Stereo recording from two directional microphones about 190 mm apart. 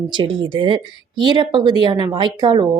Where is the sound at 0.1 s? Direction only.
25° right (ahead or behind).